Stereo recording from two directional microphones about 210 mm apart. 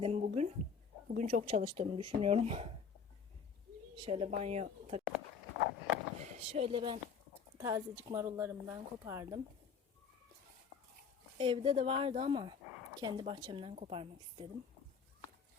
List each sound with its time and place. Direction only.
0.0 s a sound: 30° right (ahead or behind)
1.0 s a sound: 45° right (ahead or behind)
1.5 s speech: 30° right (ahead or behind)
4.0 s speech: 30° right (ahead or behind)
6.2 s speech: 35° right (ahead or behind)
7.6 s speech: 15° right (ahead or behind)
11.3 s speech: 25° right (ahead or behind)